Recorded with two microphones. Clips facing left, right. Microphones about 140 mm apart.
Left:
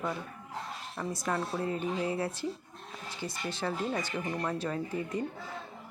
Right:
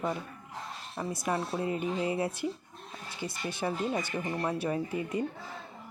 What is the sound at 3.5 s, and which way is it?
Speech, 15° right (ahead or behind).